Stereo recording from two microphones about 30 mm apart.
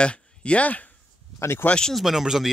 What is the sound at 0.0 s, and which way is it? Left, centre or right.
Speech, left.